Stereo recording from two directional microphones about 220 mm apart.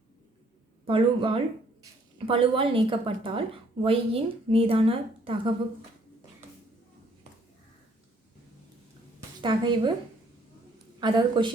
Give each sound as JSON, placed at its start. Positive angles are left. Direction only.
{"t": 0.9, "sound": "a woman's voice", "side_deg": -25}
{"t": 9.4, "sound": "a woman's voice", "side_deg": -20}
{"t": 11.0, "sound": "a woman's voice", "side_deg": -20}